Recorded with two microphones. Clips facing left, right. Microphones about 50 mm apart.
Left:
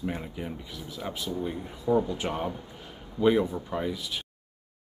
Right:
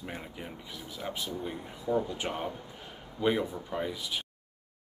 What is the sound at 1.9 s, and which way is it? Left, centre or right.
Speech, left.